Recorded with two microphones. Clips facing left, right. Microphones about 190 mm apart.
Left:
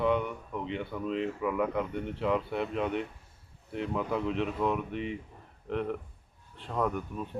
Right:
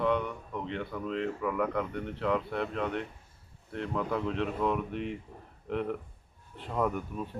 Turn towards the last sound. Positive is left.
turn(degrees=-5)  # may be behind; listen again after turning